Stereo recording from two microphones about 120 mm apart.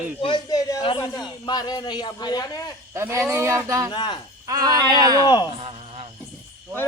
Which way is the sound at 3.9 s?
40° left (ahead or behind).